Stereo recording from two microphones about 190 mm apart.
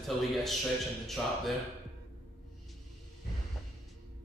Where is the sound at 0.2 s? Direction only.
Centre (ahead or behind).